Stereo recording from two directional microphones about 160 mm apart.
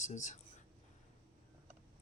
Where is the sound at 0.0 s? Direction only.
50° left (ahead or behind).